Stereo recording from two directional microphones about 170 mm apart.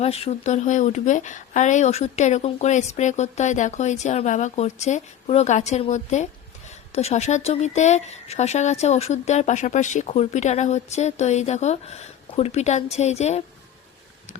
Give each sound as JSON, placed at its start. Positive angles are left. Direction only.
{"t": 0.0, "sound": "speech", "side_deg": 35}